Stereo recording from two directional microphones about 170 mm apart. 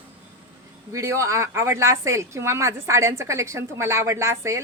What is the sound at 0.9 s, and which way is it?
Speech, 15° right (ahead or behind).